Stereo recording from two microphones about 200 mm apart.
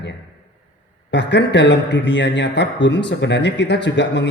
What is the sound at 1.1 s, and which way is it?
Speech, 60° left (ahead or behind).